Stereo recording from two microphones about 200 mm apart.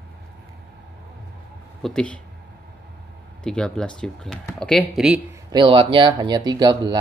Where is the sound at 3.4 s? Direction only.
5° left (ahead or behind).